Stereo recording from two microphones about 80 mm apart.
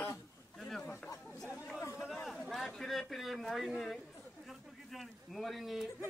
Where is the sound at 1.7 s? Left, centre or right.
Left.